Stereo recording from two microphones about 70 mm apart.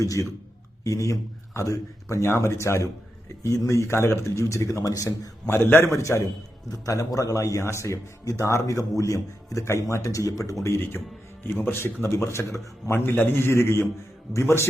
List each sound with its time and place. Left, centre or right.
0.0 s a man's voice: left
5.5 s a man's voice: left
6.0 s a man's voice: left
11.4 s a man's voice: left